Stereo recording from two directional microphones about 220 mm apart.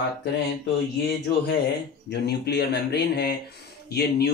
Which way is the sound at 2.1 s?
50° left (ahead or behind).